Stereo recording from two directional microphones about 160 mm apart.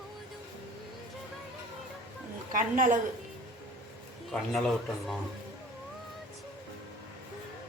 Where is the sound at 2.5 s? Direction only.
55° right (ahead or behind).